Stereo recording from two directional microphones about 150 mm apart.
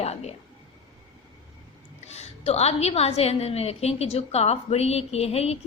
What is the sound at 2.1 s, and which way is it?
A woman's voice, 45° left (ahead or behind).